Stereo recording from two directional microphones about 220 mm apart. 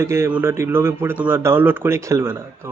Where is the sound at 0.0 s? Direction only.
10° right (ahead or behind).